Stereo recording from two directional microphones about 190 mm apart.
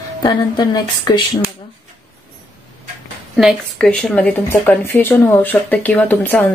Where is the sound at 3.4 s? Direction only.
Centre (ahead or behind).